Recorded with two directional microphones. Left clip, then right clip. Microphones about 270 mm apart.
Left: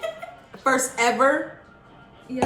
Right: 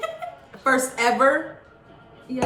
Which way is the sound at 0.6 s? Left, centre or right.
Centre.